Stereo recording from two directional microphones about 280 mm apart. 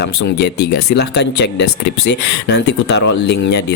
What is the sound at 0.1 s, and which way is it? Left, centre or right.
Speech, left.